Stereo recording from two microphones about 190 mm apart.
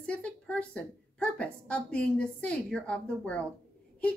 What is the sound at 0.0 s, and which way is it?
A woman's voice, 5° left (ahead or behind).